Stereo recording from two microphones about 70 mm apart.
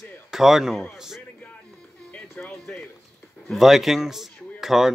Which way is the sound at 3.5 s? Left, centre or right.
Centre.